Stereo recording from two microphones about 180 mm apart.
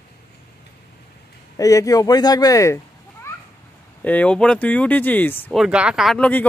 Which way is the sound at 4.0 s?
10° left (ahead or behind).